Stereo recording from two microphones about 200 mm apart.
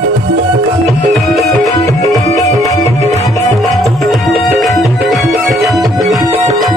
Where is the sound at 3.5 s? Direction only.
Centre (ahead or behind).